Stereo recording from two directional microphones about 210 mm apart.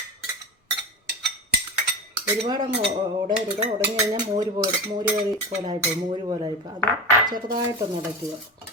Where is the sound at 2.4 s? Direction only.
25° right (ahead or behind).